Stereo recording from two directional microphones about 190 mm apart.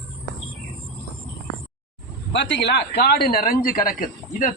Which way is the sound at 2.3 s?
65° left (ahead or behind).